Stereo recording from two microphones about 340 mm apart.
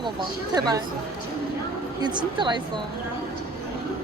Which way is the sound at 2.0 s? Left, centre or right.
Centre.